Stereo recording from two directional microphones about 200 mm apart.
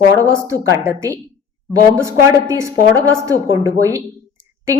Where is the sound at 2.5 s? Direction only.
15° right (ahead or behind).